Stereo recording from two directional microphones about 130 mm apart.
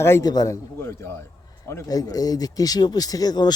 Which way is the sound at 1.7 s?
25° left (ahead or behind).